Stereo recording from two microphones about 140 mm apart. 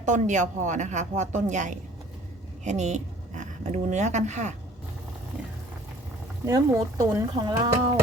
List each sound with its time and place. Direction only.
0.0 s speech: 60° right (ahead or behind)
6.4 s speech: 25° right (ahead or behind)